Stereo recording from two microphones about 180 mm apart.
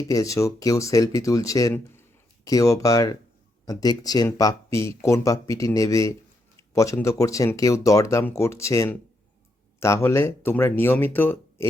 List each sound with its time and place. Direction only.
0.1 s speech: 20° left (ahead or behind)